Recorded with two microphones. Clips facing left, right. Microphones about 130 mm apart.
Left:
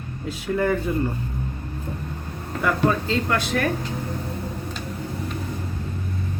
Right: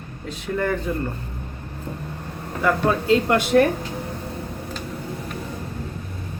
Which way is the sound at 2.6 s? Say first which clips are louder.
Right 1 dB; 5° right (ahead or behind).